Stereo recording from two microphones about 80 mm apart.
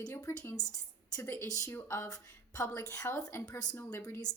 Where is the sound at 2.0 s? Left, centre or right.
Left.